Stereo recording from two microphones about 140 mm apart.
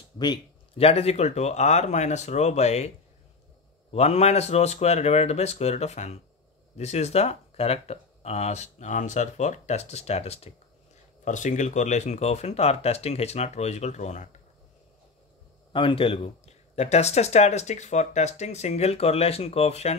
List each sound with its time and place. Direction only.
0.7 s speech: 45° left (ahead or behind)
3.9 s speech: 50° left (ahead or behind)
11.2 s speech: 60° left (ahead or behind)
15.7 s speech: 40° left (ahead or behind)